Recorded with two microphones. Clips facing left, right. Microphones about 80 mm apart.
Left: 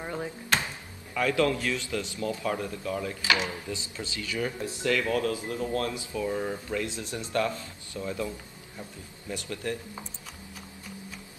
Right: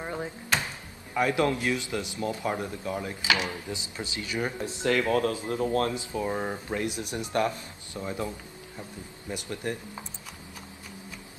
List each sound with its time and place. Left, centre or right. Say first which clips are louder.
0.0 s a sound: even; centre
1.1 s speech: even; right
5.0 s speech: right 2 dB; right
7.0 s speech: right 2 dB; centre
9.3 s speech: even; right